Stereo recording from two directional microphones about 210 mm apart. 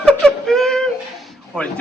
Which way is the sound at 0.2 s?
Centre (ahead or behind).